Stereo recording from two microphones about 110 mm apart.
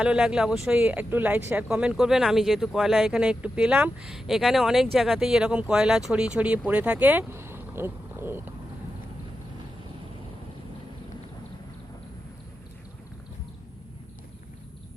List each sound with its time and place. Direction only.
0.0 s speech: 5° right (ahead or behind)